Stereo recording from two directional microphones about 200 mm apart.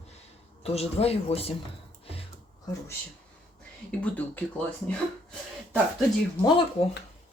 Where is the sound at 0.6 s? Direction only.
30° left (ahead or behind).